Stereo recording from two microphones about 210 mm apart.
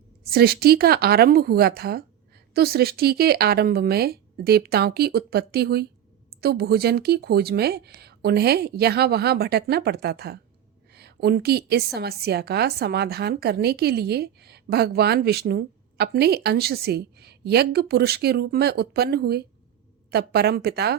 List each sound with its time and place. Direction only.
0.3 s a woman's voice: 45° right (ahead or behind)